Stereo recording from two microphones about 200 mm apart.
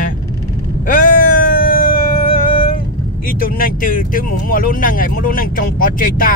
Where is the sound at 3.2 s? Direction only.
45° left (ahead or behind).